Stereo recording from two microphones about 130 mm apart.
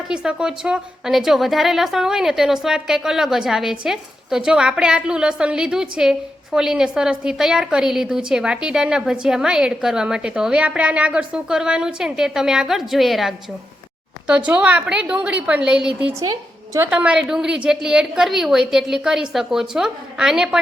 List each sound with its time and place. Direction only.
0.1 s a woman's voice: 5° right (ahead or behind)
16.2 s a sound: 30° right (ahead or behind)
16.8 s a woman's voice: 10° right (ahead or behind)